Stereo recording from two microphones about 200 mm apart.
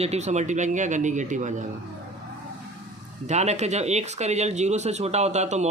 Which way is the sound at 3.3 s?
35° right (ahead or behind).